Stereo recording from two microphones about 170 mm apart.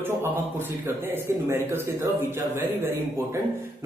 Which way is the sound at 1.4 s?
15° right (ahead or behind).